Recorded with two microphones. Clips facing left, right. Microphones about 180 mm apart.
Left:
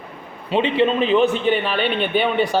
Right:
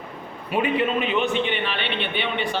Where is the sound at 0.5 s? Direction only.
25° left (ahead or behind).